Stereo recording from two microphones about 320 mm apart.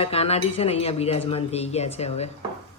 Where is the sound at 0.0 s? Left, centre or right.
Centre.